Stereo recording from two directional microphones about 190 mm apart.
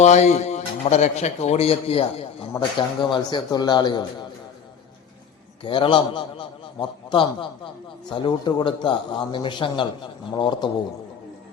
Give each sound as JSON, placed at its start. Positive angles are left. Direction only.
{"t": 0.0, "sound": "a man's voice", "side_deg": 35}
{"t": 5.6, "sound": "a man's voice", "side_deg": 25}